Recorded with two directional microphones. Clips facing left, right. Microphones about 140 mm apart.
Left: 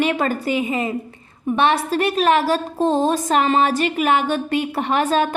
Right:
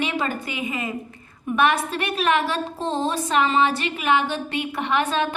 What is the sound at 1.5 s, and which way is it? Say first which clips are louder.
A woman's voice: left 3 dB; 30° left (ahead or behind).